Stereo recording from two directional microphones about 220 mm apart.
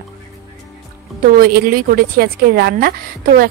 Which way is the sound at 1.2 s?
40° right (ahead or behind).